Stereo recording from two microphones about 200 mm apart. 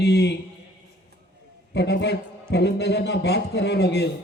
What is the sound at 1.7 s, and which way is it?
Speech, 55° left (ahead or behind).